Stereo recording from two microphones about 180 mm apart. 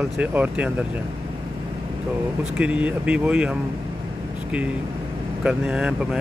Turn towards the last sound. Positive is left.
turn(degrees=-5)  # may be behind; listen again after turning